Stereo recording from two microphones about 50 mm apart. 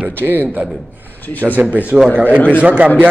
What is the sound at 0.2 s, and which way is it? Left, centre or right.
A man's voice, right.